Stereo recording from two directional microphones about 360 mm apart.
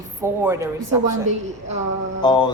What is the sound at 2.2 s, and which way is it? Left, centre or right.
Speech, centre.